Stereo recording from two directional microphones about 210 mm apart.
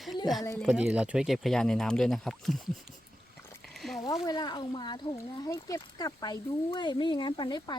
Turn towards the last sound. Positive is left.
turn(degrees=20)  # may be behind; listen again after turning